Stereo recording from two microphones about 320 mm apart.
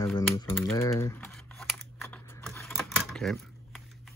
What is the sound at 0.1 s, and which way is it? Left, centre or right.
Typing, centre.